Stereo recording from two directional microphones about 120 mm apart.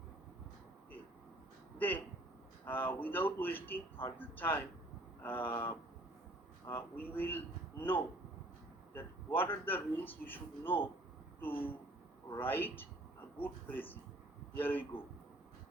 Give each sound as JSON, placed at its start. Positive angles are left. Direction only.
{"t": 2.6, "sound": "a man's voice", "side_deg": 15}